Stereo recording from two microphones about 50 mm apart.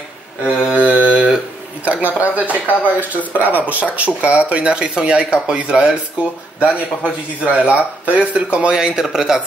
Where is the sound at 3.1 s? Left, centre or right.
Right.